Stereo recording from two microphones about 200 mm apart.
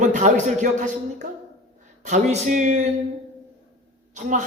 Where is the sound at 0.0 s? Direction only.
35° right (ahead or behind).